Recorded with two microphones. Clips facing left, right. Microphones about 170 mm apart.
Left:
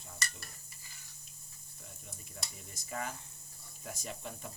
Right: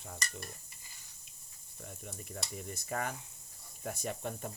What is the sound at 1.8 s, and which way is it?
Cricket, 55° right (ahead or behind).